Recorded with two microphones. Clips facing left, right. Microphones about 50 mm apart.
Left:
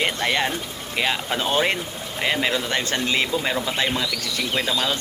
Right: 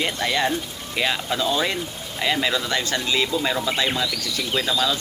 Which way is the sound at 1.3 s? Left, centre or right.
Left.